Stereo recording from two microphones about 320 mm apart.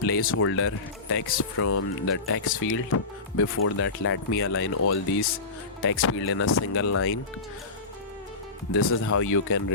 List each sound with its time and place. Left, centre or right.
0.2 s speech: left
8.7 s speech: left